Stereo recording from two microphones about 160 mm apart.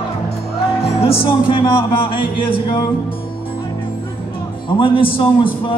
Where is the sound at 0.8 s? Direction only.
40° left (ahead or behind).